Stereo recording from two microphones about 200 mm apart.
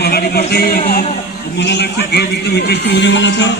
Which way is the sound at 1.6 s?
60° left (ahead or behind).